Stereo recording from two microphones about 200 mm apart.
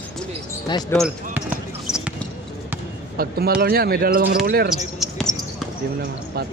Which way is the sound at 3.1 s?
50° right (ahead or behind).